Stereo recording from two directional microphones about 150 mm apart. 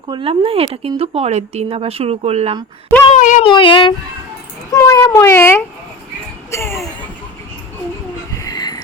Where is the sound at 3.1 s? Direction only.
55° left (ahead or behind).